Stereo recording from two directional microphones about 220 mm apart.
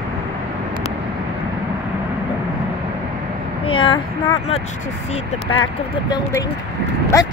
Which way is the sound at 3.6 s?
25° left (ahead or behind).